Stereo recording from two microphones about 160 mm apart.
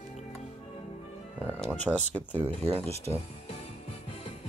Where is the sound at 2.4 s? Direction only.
40° right (ahead or behind).